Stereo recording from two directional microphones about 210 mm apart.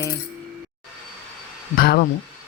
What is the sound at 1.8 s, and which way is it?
Speech, 45° left (ahead or behind).